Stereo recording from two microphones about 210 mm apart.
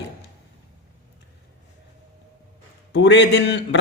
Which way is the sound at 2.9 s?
55° left (ahead or behind).